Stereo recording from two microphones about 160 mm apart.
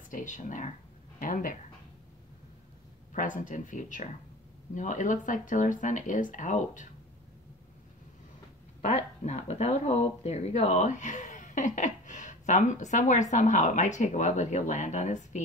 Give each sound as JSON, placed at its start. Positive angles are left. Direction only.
{"t": 0.1, "sound": "speech", "side_deg": 50}
{"t": 3.1, "sound": "speech", "side_deg": 55}
{"t": 8.8, "sound": "speech", "side_deg": 45}